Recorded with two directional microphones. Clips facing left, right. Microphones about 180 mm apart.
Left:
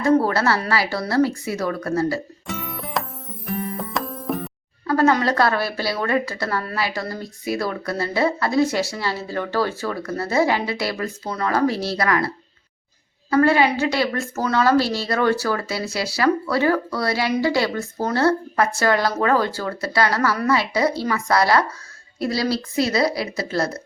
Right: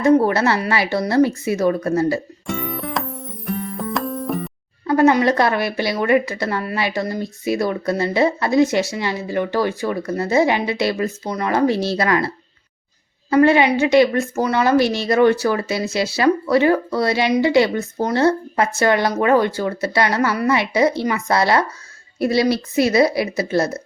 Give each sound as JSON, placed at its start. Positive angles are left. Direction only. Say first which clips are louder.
{"t": 0.0, "sound": "speech", "louder": "right 3 dB", "side_deg": -20}
{"t": 2.5, "sound": "music", "louder": "right 4 dB", "side_deg": 0}
{"t": 4.9, "sound": "speech", "louder": "right 4 dB", "side_deg": -20}
{"t": 13.3, "sound": "speech", "louder": "right 3 dB", "side_deg": -20}